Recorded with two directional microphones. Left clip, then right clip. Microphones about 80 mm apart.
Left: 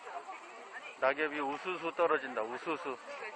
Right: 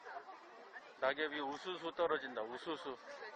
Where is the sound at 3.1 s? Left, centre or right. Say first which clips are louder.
Left 7 dB; right.